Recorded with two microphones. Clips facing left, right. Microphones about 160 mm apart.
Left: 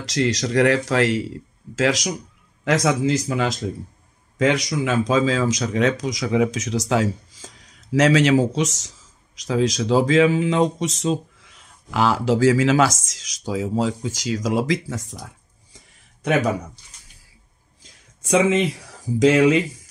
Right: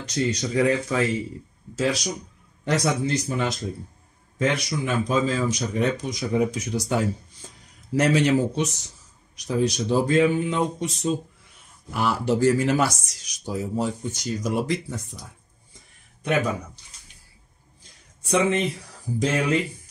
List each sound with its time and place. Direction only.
0.0 s speech: 90° left
15.7 s a sound: 85° left
18.2 s speech: 90° left